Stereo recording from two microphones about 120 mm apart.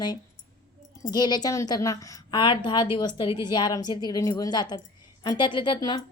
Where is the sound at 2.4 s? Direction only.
40° left (ahead or behind).